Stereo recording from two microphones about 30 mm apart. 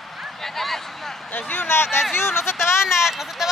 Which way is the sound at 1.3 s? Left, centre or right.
Left.